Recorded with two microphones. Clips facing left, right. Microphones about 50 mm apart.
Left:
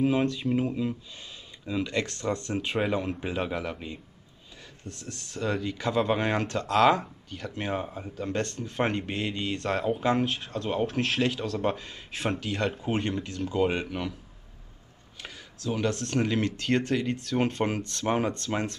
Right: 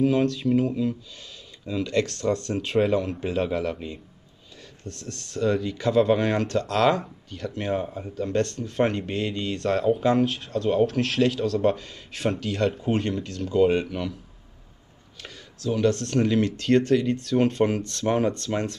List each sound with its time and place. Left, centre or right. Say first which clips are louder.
0.0 s speech: right 3 dB; centre
15.2 s speech: right 4 dB; centre